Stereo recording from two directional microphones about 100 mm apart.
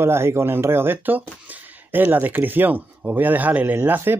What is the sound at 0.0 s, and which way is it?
Speech, 25° right (ahead or behind).